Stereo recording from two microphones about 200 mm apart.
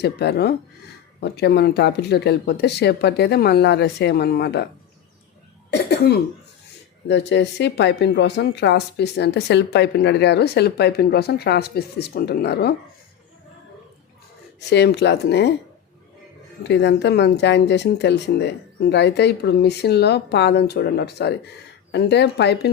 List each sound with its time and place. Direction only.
0.0 s a woman's voice: 55° left (ahead or behind)
7.1 s a woman's voice: 60° left (ahead or behind)
14.7 s a woman's voice: 60° left (ahead or behind)
16.6 s a woman's voice: 60° left (ahead or behind)